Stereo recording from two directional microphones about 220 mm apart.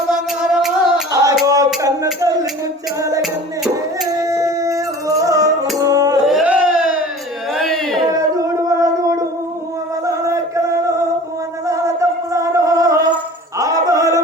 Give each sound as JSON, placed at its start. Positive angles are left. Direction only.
{"t": 0.5, "sound": "music", "side_deg": 0}
{"t": 1.1, "sound": "music", "side_deg": -15}
{"t": 1.5, "sound": "a sound", "side_deg": -15}
{"t": 2.2, "sound": "speech", "side_deg": -15}
{"t": 4.3, "sound": "music", "side_deg": -15}
{"t": 6.2, "sound": "a sound", "side_deg": -5}
{"t": 8.1, "sound": "singing", "side_deg": -15}
{"t": 10.2, "sound": "music", "side_deg": -15}
{"t": 11.6, "sound": "music", "side_deg": -15}